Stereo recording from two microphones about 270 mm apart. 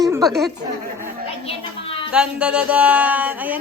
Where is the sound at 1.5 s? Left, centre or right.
Centre.